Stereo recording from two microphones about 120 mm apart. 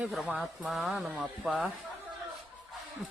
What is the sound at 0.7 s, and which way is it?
Speech, centre (ahead or behind).